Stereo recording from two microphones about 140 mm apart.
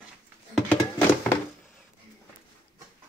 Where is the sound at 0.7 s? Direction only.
10° left (ahead or behind).